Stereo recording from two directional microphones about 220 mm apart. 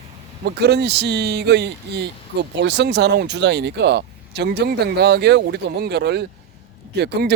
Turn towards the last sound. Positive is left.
turn(degrees=-50)  # may be behind; listen again after turning